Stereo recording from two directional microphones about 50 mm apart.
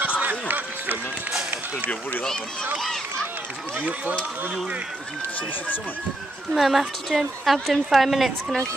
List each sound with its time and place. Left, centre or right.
0.0 s run: right
3.7 s speech: right
6.5 s a woman's voice: centre